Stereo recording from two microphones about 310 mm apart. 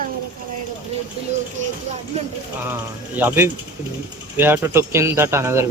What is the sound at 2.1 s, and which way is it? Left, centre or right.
Speech, centre.